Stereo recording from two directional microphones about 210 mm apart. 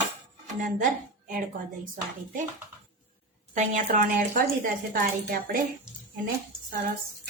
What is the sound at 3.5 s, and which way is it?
A woman's voice, 40° right (ahead or behind).